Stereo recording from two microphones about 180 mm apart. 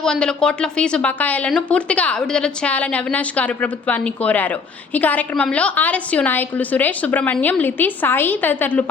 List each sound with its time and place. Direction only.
0.0 s speech: 5° left (ahead or behind)